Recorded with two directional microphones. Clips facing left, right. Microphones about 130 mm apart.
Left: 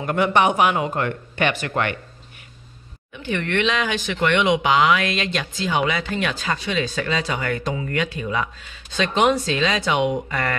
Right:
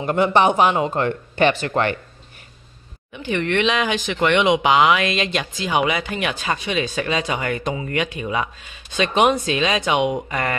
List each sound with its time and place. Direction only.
0.0 s speech: 25° right (ahead or behind)
3.1 s speech: 20° right (ahead or behind)